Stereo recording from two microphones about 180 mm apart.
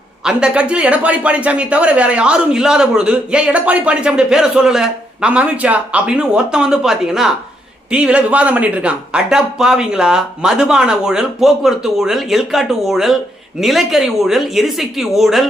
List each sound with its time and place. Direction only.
0.3 s speech: 5° right (ahead or behind)